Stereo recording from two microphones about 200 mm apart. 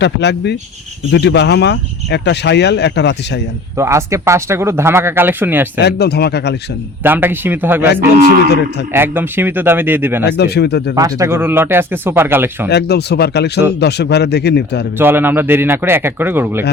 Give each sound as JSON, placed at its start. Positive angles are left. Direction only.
{"t": 0.0, "sound": "speech", "side_deg": 60}
{"t": 3.8, "sound": "speech", "side_deg": -15}
{"t": 5.8, "sound": "speech", "side_deg": 55}
{"t": 7.0, "sound": "speech", "side_deg": -10}
{"t": 8.9, "sound": "speech", "side_deg": -10}
{"t": 10.2, "sound": "speech", "side_deg": 55}
{"t": 10.9, "sound": "speech", "side_deg": -15}
{"t": 12.7, "sound": "speech", "side_deg": 55}
{"t": 14.9, "sound": "speech", "side_deg": -10}